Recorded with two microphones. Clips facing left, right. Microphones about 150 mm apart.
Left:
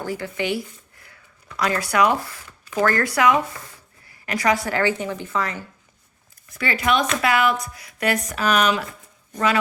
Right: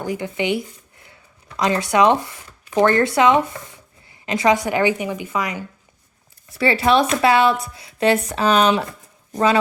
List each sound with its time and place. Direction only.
0.0 s speech: 20° right (ahead or behind)
6.6 s speech: 30° right (ahead or behind)